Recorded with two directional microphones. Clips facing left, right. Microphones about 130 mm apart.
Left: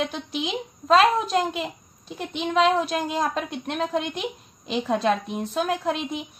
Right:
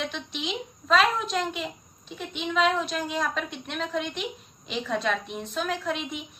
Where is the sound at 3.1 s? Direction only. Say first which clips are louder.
Left 4 dB; 35° left (ahead or behind).